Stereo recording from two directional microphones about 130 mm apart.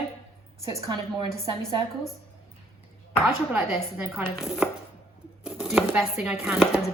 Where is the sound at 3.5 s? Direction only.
10° right (ahead or behind).